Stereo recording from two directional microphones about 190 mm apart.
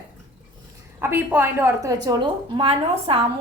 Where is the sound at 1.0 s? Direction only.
10° right (ahead or behind).